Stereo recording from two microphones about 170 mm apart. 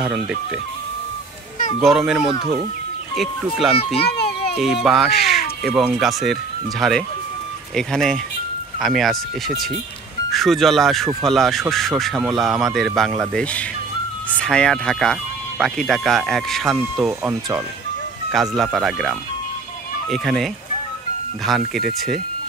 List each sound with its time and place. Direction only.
0.0 s speech: 5° right (ahead or behind)
1.8 s speech: 5° right (ahead or behind)
4.0 s children playing: 70° left (ahead or behind)
4.6 s speech: centre (ahead or behind)
18.6 s speech: centre (ahead or behind)
21.5 s speech: centre (ahead or behind)